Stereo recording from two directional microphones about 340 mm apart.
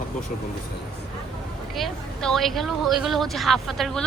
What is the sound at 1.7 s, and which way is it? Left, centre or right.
Speech, centre.